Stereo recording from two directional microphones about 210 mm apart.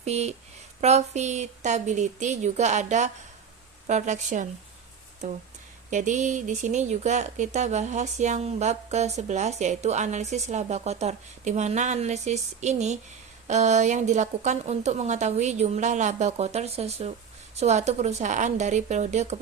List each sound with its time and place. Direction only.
0.0 s speech: 30° right (ahead or behind)